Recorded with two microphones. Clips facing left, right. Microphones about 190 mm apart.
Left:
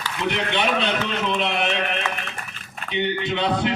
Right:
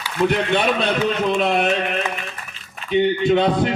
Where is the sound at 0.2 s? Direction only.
45° right (ahead or behind).